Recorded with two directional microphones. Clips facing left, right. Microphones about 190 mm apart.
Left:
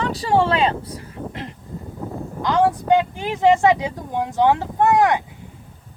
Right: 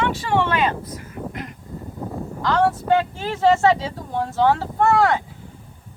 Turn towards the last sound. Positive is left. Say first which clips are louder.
# left 1 dB
turn(degrees=15)  # may be behind; listen again after turning